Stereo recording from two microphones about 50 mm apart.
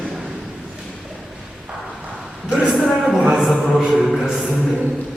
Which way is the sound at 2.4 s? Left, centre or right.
Centre.